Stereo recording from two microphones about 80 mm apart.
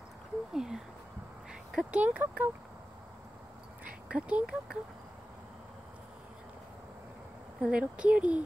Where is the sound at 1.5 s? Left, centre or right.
Centre.